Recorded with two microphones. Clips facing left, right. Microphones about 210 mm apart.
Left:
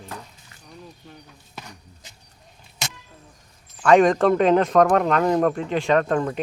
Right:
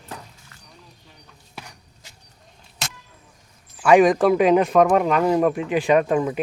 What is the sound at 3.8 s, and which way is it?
Speech, 10° right (ahead or behind).